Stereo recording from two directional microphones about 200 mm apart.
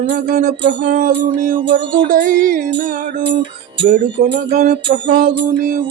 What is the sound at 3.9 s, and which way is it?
Speech, 40° right (ahead or behind).